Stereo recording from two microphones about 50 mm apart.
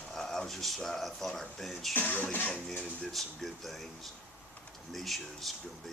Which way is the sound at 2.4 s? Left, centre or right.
Left.